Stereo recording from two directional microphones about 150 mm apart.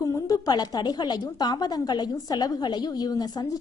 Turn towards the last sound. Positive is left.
turn(degrees=25)  # may be behind; listen again after turning